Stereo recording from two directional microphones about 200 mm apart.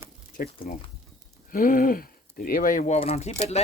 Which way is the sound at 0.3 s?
45° left (ahead or behind).